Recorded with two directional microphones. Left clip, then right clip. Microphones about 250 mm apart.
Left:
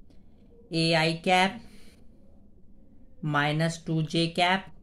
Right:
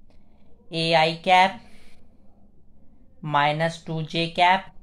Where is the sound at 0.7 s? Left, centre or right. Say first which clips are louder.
Right 5 dB; centre.